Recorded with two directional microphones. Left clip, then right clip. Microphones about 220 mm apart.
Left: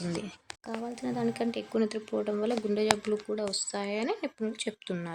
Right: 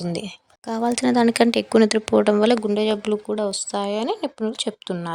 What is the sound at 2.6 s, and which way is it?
Speech, 35° right (ahead or behind).